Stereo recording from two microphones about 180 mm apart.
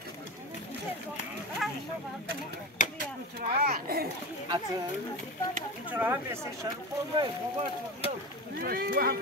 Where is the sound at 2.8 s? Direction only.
45° left (ahead or behind).